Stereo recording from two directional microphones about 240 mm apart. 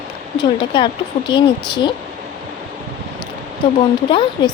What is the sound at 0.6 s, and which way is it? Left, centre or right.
A woman's voice, centre.